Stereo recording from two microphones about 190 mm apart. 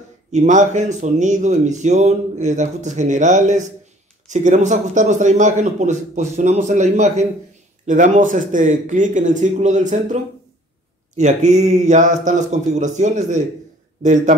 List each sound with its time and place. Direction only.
0.3 s speech: 40° right (ahead or behind)